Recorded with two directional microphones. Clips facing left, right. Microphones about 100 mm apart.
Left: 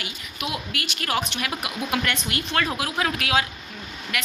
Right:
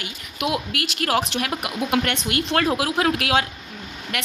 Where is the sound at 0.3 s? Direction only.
75° right (ahead or behind).